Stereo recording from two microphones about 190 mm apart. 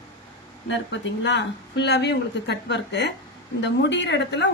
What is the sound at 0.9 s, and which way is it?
A woman's voice, 70° left (ahead or behind).